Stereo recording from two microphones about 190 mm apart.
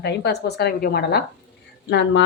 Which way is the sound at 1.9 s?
70° left (ahead or behind).